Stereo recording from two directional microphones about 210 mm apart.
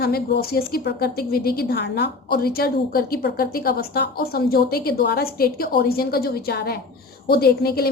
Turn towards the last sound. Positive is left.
turn(degrees=45)  # may be behind; listen again after turning